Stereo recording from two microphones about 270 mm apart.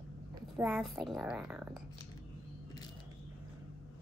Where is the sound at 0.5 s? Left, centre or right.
Centre.